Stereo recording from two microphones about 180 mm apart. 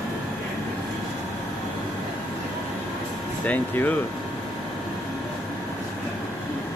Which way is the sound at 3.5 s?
10° left (ahead or behind).